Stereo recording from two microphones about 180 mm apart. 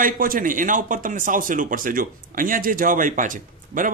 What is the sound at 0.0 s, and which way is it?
Speech, 50° right (ahead or behind).